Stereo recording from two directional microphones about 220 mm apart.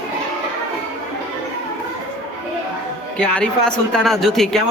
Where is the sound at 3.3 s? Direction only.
Centre (ahead or behind).